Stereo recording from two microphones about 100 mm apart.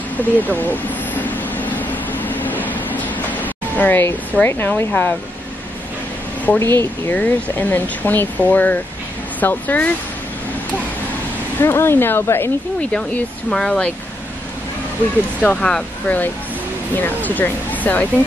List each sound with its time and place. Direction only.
0.2 s vehicle: 15° left (ahead or behind)
3.7 s speech: 20° left (ahead or behind)
6.6 s speech: 25° left (ahead or behind)
11.6 s speech: 25° left (ahead or behind)
12.9 s speech: 10° left (ahead or behind)
15.4 s speech: 10° left (ahead or behind)